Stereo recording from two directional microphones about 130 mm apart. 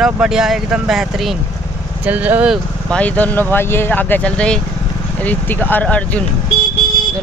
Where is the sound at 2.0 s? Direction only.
10° right (ahead or behind).